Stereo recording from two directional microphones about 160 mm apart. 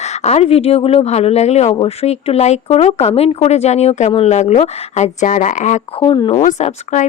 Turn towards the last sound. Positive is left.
turn(degrees=45)  # may be behind; listen again after turning